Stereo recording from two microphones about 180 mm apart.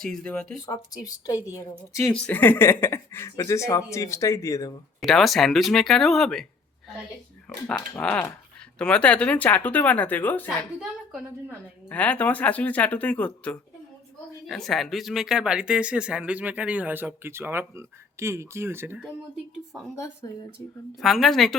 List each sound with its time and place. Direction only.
0.0 s speech: 5° left (ahead or behind)
0.6 s speech: 20° left (ahead or behind)
4.9 s speech: centre (ahead or behind)
7.7 s speech: 5° left (ahead or behind)
11.9 s speech: 10° left (ahead or behind); by 19.1 s 10° right (ahead or behind)
20.2 s speech: 15° left (ahead or behind)
21.0 s speech: centre (ahead or behind)